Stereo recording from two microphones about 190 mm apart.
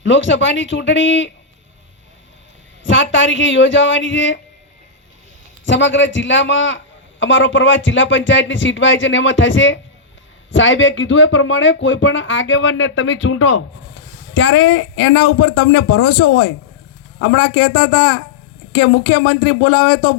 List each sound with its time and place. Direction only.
0.0 s speech: 75° left (ahead or behind)
2.8 s a man's voice: 80° left
5.6 s a man's voice: 75° left (ahead or behind)
17.2 s speech: 90° left; by 20.1 s 60° left (ahead or behind)